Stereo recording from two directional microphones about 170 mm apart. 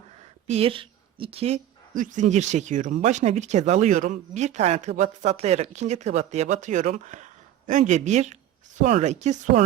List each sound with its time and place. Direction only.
0.4 s a woman's voice: 35° right (ahead or behind)